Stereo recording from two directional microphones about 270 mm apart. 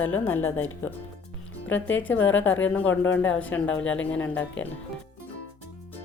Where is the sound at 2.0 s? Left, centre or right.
Centre.